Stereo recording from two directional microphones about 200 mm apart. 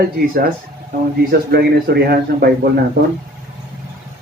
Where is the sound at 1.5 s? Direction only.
55° right (ahead or behind).